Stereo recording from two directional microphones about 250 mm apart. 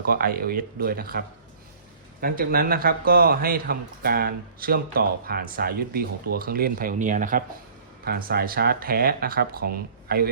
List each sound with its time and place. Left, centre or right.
0.1 s a man's voice: right
2.2 s a man's voice: right